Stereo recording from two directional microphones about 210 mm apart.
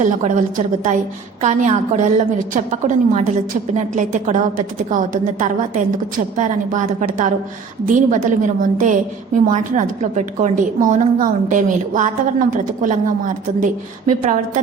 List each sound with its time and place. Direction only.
0.0 s a woman's voice: 35° right (ahead or behind)